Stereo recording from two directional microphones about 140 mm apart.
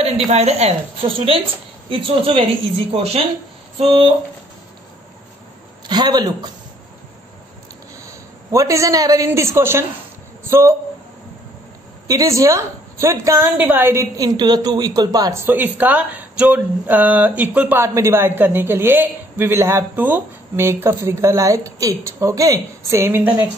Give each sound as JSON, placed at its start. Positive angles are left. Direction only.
{"t": 0.3, "sound": "a woman's voice", "side_deg": -50}
{"t": 5.9, "sound": "a man's voice", "side_deg": -30}
{"t": 8.0, "sound": "a man's voice", "side_deg": -20}
{"t": 12.1, "sound": "a woman's voice", "side_deg": -25}
{"t": 15.4, "sound": "speech", "side_deg": -15}